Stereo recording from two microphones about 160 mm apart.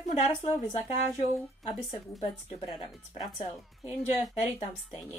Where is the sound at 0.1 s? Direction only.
45° left (ahead or behind).